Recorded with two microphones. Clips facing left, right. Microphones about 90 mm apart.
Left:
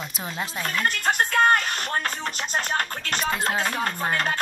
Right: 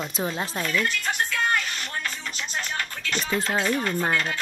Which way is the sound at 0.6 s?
40° left (ahead or behind).